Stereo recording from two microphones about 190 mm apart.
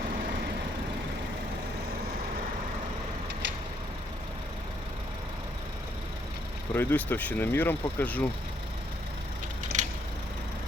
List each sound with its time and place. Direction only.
6.7 s speech: 10° left (ahead or behind)
9.7 s mechanisms: 40° right (ahead or behind)